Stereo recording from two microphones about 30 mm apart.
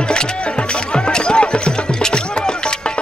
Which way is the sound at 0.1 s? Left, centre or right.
Left.